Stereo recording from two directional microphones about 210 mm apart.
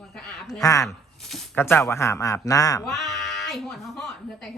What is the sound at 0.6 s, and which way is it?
Speech, 15° left (ahead or behind).